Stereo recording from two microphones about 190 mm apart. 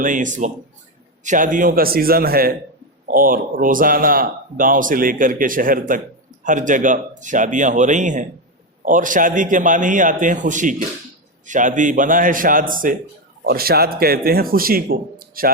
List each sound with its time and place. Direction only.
0.0 s speech: 45° right (ahead or behind)